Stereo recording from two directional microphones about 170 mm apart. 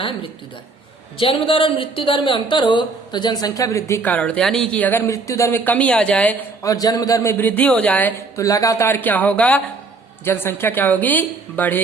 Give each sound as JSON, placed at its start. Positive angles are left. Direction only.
{"t": 1.2, "sound": "speech", "side_deg": 30}
{"t": 6.6, "sound": "speech", "side_deg": 20}